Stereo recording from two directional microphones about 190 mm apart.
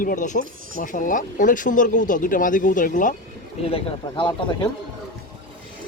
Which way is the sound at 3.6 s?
30° left (ahead or behind).